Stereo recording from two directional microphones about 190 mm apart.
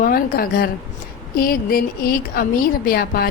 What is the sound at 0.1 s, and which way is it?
A woman's voice, 50° left (ahead or behind).